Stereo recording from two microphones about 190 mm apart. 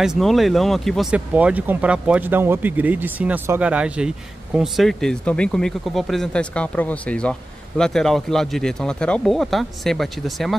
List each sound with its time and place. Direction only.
0.0 s speech: centre (ahead or behind)